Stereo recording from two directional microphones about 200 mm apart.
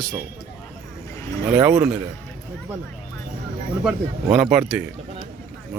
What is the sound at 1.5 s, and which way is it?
Speech, 5° right (ahead or behind).